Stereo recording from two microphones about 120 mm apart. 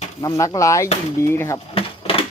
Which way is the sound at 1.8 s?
50° left (ahead or behind).